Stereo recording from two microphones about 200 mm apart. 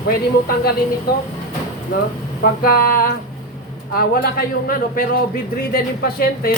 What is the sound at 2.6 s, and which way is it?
A man's voice, 45° left (ahead or behind).